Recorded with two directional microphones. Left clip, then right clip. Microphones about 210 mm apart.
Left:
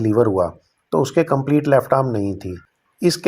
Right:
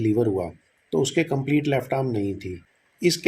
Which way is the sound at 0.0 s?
25° left (ahead or behind).